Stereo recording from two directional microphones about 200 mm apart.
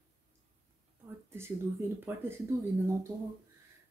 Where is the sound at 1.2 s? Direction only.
10° right (ahead or behind).